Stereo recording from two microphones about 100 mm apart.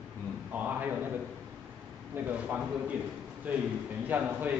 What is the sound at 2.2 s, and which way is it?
Speech, 20° right (ahead or behind).